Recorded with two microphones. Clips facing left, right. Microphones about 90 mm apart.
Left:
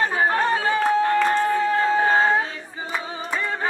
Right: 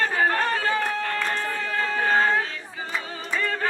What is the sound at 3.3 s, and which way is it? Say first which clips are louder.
Music: even; 20° left (ahead or behind).